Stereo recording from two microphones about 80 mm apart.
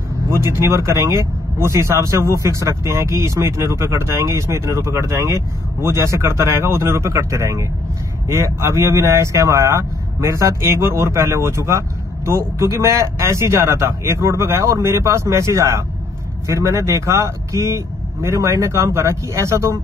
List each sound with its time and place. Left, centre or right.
0.3 s a man's voice: right